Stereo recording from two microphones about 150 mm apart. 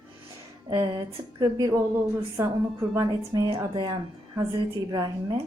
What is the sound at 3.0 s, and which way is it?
A woman's voice, 25° right (ahead or behind).